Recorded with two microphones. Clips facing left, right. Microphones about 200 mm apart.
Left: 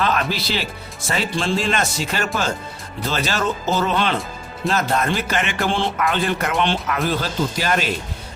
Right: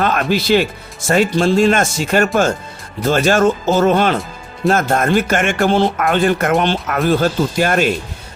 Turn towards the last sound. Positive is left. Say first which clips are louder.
# right 6 dB
turn(degrees=-50)  # may be behind; listen again after turning